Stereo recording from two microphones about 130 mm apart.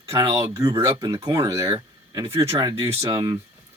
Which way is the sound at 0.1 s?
25° right (ahead or behind).